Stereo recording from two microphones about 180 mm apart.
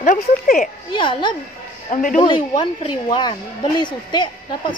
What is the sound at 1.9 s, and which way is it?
Speech, 45° left (ahead or behind).